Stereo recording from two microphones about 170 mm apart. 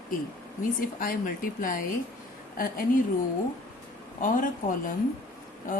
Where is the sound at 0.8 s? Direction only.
55° left (ahead or behind).